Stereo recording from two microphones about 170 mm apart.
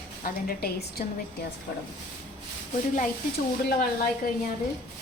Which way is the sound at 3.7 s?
60° left (ahead or behind).